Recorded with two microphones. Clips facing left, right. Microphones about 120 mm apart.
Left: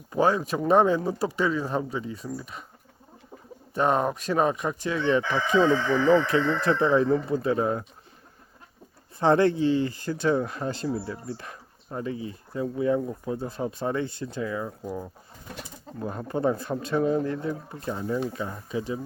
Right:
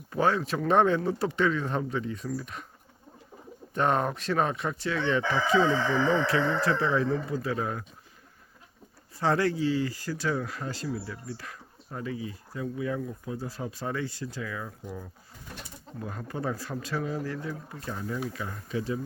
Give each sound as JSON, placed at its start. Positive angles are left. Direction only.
{"t": 0.1, "sound": "speech", "side_deg": 15}
{"t": 3.8, "sound": "speech", "side_deg": 10}
{"t": 9.1, "sound": "speech", "side_deg": 20}
{"t": 16.0, "sound": "speech", "side_deg": 30}